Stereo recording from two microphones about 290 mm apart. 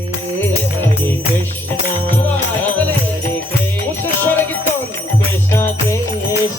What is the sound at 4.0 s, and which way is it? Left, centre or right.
Music, centre.